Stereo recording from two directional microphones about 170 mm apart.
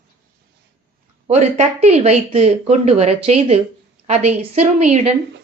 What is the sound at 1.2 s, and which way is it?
A woman's voice, 40° right (ahead or behind).